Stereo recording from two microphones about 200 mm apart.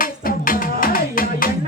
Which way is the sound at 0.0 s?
45° left (ahead or behind).